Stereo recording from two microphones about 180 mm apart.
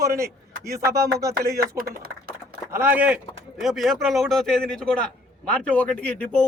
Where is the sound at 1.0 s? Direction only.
20° right (ahead or behind).